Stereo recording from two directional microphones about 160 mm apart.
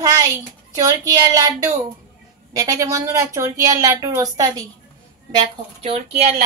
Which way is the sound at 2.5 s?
20° right (ahead or behind).